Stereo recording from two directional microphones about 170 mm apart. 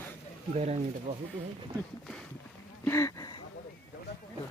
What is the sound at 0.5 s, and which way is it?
Speech, 40° right (ahead or behind).